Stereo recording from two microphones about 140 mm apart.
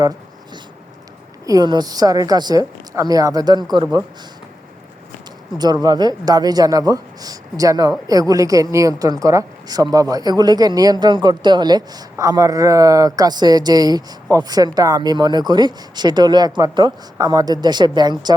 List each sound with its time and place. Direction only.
1.5 s speech: 30° right (ahead or behind)
5.5 s speech: 30° right (ahead or behind)